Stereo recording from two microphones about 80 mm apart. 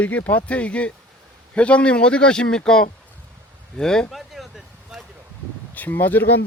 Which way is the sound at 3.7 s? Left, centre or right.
Centre.